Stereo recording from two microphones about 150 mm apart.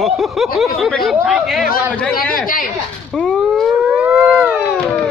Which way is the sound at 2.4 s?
70° left (ahead or behind).